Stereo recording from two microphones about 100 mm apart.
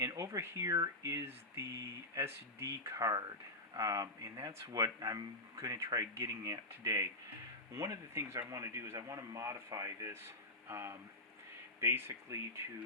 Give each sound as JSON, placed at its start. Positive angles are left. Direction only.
{"t": 0.0, "sound": "speech", "side_deg": -35}